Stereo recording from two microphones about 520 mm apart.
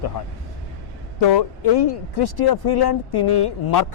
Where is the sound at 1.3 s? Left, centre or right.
Left.